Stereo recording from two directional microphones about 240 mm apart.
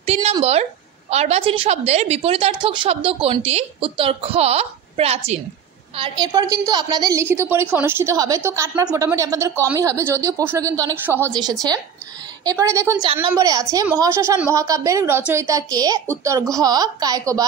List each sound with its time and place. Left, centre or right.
0.0 s a sound: right
1.1 s a woman's voice: right
12.4 s a woman's voice: centre